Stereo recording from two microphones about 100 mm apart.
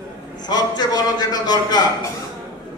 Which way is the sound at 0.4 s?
45° left (ahead or behind).